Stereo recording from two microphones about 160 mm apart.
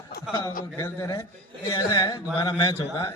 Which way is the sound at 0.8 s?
20° left (ahead or behind).